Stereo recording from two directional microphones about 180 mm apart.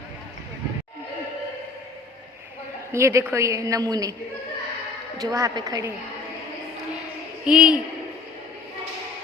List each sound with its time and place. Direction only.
2.9 s a woman's voice: 15° right (ahead or behind)
5.3 s a woman's voice: 20° right (ahead or behind)
7.4 s a man's voice: 5° right (ahead or behind)